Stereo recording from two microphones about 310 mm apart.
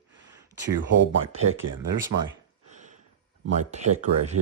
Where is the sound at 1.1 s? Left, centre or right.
Right.